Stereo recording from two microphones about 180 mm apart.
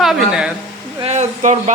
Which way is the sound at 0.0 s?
Centre (ahead or behind).